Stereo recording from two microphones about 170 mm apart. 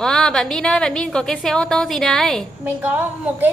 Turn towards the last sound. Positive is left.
turn(degrees=-10)  # may be behind; listen again after turning